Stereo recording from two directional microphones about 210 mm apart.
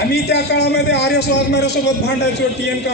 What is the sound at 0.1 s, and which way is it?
Speech, 55° left (ahead or behind).